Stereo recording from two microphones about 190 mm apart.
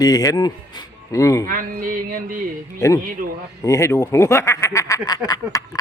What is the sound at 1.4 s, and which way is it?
Music, 45° right (ahead or behind).